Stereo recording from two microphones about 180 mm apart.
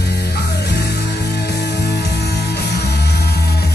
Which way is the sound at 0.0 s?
65° left (ahead or behind).